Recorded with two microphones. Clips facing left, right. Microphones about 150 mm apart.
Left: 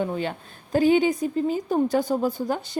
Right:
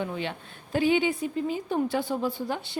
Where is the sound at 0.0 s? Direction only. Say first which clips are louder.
Left 5 dB; 40° left (ahead or behind).